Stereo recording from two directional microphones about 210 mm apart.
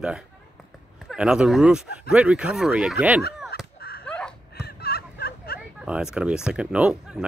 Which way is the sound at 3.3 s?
Centre (ahead or behind).